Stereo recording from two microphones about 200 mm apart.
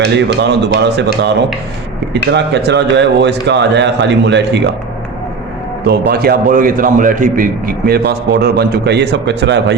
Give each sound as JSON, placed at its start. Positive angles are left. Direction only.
{"t": 0.0, "sound": "a man's voice", "side_deg": -60}
{"t": 5.8, "sound": "a man's voice", "side_deg": -50}